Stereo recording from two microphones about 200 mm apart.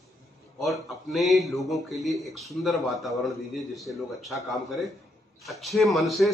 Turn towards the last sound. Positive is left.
turn(degrees=0)  # may be behind; listen again after turning